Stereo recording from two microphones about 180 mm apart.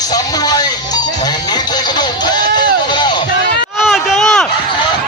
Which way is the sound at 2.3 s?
25° left (ahead or behind).